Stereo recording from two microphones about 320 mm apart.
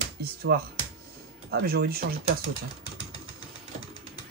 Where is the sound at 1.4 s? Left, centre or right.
Right.